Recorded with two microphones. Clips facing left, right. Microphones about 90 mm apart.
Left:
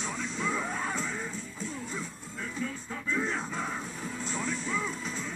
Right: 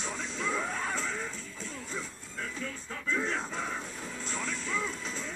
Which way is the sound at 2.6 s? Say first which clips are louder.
Left 2 dB; 15° left (ahead or behind).